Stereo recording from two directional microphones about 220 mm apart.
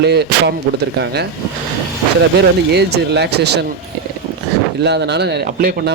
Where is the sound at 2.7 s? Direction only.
50° right (ahead or behind).